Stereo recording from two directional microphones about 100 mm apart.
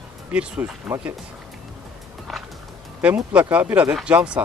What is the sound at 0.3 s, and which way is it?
Speech, 10° right (ahead or behind).